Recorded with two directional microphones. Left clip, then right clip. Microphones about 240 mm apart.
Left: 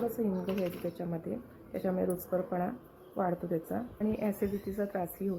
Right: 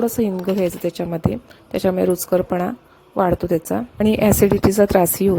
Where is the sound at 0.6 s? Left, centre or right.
Right.